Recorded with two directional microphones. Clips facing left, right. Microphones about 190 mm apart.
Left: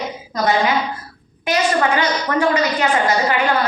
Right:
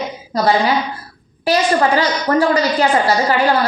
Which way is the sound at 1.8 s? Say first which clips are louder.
Right 2 dB; 35° right (ahead or behind).